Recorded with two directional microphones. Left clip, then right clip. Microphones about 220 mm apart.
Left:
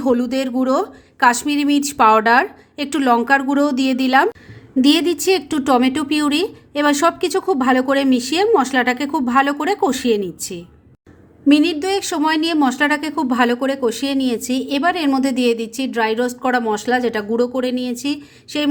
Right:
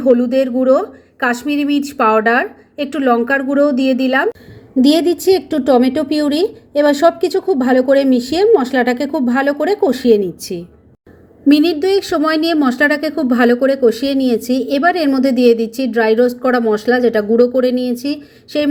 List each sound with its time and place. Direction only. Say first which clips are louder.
0.0 s a woman's voice: right 6 dB; 25° left (ahead or behind)
4.8 s a woman's voice: right 3 dB; 10° left (ahead or behind)